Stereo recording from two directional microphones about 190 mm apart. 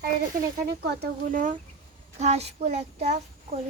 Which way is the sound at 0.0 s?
50° right (ahead or behind).